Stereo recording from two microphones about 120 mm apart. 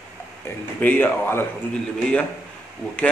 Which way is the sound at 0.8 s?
15° left (ahead or behind).